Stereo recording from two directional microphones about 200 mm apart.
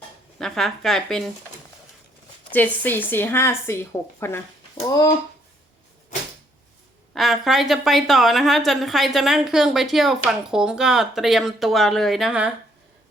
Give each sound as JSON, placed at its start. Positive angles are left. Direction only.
{"t": 0.3, "sound": "a woman's voice", "side_deg": 0}
{"t": 2.5, "sound": "a woman's voice", "side_deg": 10}
{"t": 7.1, "sound": "a woman's voice", "side_deg": 0}